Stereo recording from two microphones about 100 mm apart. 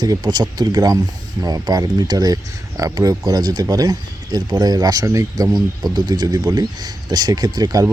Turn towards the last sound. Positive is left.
turn(degrees=-40)  # may be behind; listen again after turning